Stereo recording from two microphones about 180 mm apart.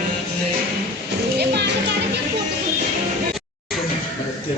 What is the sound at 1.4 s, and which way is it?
Music, 70° right (ahead or behind).